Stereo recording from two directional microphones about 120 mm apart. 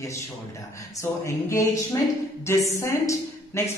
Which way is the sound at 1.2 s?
25° left (ahead or behind).